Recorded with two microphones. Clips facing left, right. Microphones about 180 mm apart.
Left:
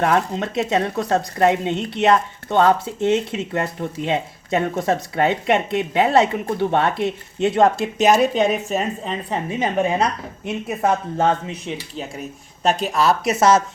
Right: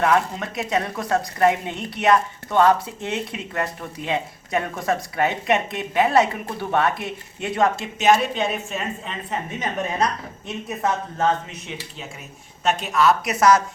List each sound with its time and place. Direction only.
0.0 s speech: 30° left (ahead or behind)
11.2 s speech: 30° left (ahead or behind)